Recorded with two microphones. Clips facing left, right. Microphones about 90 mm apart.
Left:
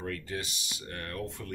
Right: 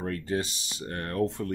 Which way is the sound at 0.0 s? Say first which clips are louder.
Right 6 dB; 35° right (ahead or behind).